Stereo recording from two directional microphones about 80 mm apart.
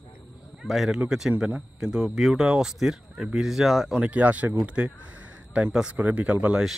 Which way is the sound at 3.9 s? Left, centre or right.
Centre.